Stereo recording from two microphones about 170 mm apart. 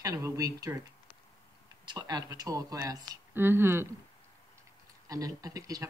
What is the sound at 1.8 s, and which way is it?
Speech, 25° right (ahead or behind).